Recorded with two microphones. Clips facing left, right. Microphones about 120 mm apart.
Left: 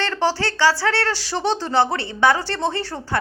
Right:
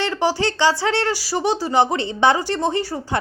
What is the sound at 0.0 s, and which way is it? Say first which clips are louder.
Speech: right 1 dB; 15° right (ahead or behind).